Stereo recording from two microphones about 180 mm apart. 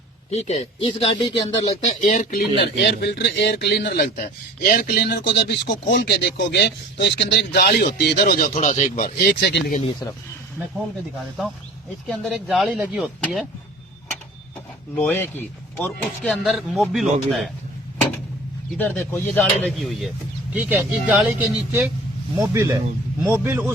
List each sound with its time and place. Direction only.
0.3 s speech: 35° left (ahead or behind)
1.8 s speech: 40° left (ahead or behind)
8.5 s speech: 40° left (ahead or behind)
9.1 s speech: 60° left (ahead or behind)
11.4 s speech: centre (ahead or behind)
13.2 s speech: 10° left (ahead or behind)
14.9 s speech: 10° left (ahead or behind)
15.8 s speech: centre (ahead or behind)
18.8 s speech: 10° left (ahead or behind)
20.5 s speech: 10° right (ahead or behind)